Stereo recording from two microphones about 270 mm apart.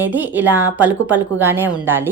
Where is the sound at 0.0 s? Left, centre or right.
Centre.